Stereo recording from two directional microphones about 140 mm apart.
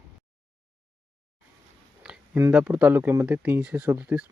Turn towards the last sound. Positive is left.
turn(degrees=-10)  # may be behind; listen again after turning